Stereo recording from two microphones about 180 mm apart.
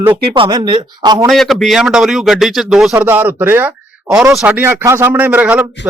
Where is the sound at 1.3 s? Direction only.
Centre (ahead or behind).